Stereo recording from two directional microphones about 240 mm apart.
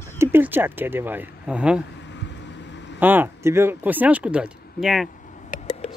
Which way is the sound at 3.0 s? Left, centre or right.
Centre.